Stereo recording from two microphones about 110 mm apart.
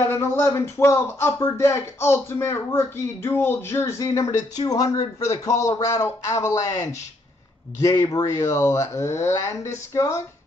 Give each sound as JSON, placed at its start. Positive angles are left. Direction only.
{"t": 0.1, "sound": "speech", "side_deg": 25}